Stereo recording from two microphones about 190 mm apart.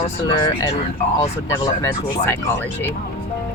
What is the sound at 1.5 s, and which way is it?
Speech, 15° left (ahead or behind).